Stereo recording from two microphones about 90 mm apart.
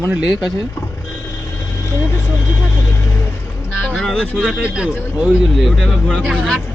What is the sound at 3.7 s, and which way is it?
Speech, 5° left (ahead or behind).